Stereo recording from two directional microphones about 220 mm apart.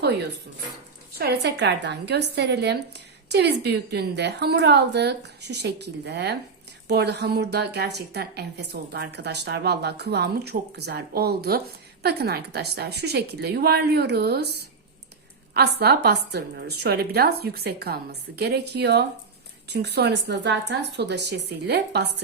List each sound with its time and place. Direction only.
1.2 s a woman's voice: 50° right (ahead or behind)